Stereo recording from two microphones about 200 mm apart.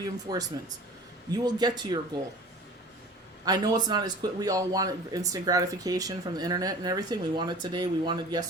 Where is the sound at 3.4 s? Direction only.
20° right (ahead or behind).